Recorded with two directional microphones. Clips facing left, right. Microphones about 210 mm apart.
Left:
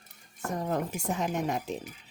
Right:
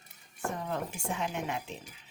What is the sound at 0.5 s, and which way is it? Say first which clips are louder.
Speech: left 5 dB; 40° left (ahead or behind).